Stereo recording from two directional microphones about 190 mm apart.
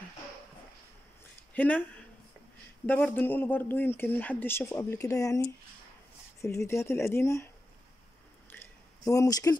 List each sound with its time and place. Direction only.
1.5 s speech: 10° left (ahead or behind)
2.9 s speech: 10° left (ahead or behind)
8.5 s a sound: 15° left (ahead or behind)